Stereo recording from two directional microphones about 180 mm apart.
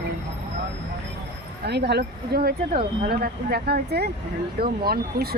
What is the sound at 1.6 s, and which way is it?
Speech, 65° right (ahead or behind).